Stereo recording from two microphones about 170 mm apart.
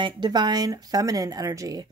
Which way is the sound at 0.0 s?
25° right (ahead or behind).